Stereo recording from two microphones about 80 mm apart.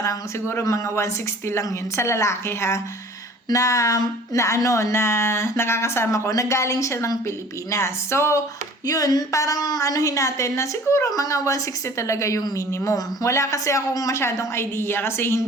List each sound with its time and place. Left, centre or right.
0.0 s a woman's voice: left
8.9 s a woman's voice: left